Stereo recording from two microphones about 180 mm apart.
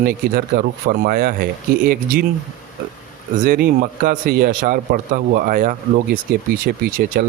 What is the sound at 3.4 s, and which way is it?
A man's voice, 55° right (ahead or behind).